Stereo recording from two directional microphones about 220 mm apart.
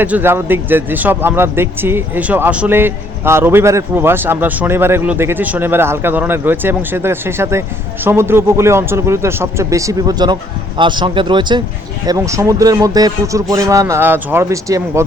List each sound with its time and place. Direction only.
0.0 s a man's voice: 10° right (ahead or behind)